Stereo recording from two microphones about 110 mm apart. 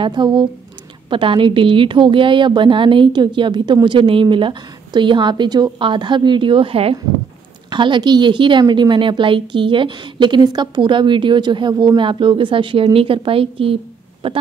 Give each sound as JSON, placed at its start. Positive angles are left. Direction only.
{"t": 0.0, "sound": "a woman's voice", "side_deg": -45}
{"t": 7.7, "sound": "a woman's voice", "side_deg": -45}